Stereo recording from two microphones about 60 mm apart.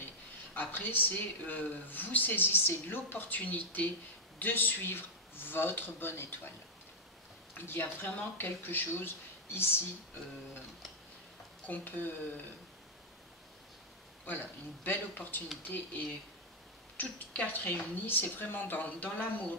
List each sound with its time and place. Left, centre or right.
0.6 s speech: left
7.5 s speech: left
11.6 s speech: left
14.2 s speech: left
16.9 s speech: left